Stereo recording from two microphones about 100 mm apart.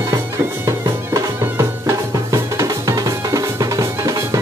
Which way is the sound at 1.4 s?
30° right (ahead or behind).